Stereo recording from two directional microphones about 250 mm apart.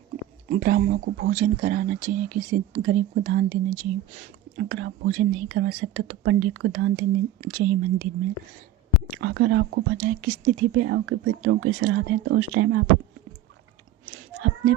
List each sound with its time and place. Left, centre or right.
0.5 s speech: right
9.2 s speech: right